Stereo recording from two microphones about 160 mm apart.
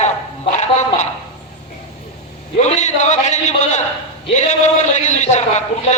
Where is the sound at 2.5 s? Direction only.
45° left (ahead or behind).